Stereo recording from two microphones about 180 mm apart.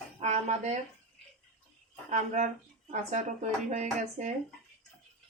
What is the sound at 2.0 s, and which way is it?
Speech, 40° right (ahead or behind).